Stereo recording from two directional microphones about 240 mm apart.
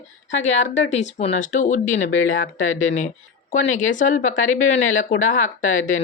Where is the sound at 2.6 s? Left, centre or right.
Left.